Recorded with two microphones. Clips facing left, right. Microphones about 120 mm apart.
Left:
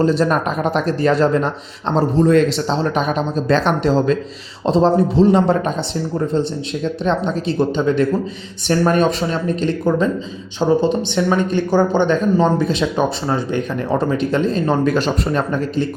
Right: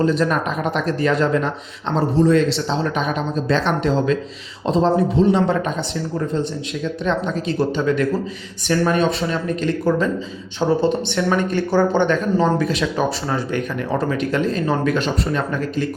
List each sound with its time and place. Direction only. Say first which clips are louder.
0.0 s speech: left 2 dB; 35° left (ahead or behind)
2.0 s a man's voice: left 2 dB; 50° left (ahead or behind)
2.6 s speech: left 3 dB; 40° left (ahead or behind)
7.0 s speech: left 2 dB; 30° left (ahead or behind)
8.9 s a man's voice: left 3 dB; 45° left (ahead or behind)
9.6 s speech: left 1 dB; 20° left (ahead or behind)